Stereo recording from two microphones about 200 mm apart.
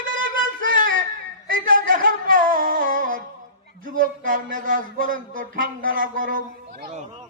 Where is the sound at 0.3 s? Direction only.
45° right (ahead or behind).